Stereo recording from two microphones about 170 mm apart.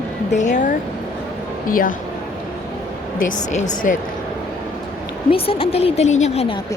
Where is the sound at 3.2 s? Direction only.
45° left (ahead or behind).